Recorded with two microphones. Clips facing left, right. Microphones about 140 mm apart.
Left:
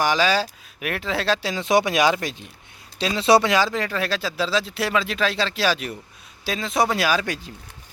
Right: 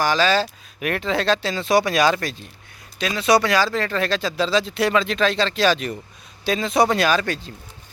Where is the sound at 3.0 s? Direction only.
25° left (ahead or behind).